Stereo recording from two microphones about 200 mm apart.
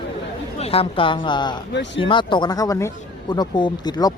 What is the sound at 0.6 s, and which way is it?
Speech, 30° left (ahead or behind).